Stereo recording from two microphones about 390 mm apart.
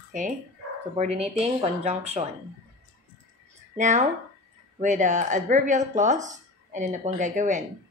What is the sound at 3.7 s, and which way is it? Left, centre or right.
Speech, centre.